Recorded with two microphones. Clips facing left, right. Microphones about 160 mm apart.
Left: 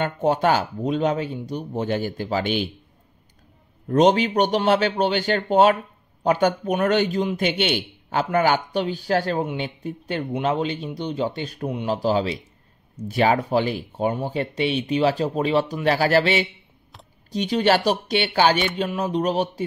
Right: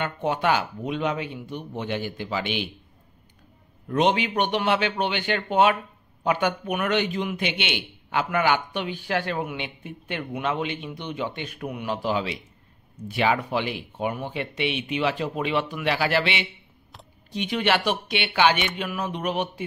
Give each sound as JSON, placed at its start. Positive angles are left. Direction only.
{"t": 0.0, "sound": "a man's voice", "side_deg": 40}
{"t": 3.8, "sound": "a man's voice", "side_deg": 40}